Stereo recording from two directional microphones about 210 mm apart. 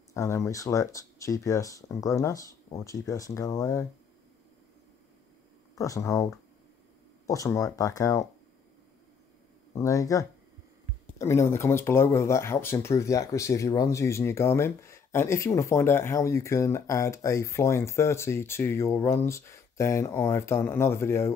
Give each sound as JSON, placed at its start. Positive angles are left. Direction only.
{"t": 0.1, "sound": "speech", "side_deg": 15}
{"t": 5.8, "sound": "speech", "side_deg": 15}
{"t": 9.8, "sound": "speech", "side_deg": 15}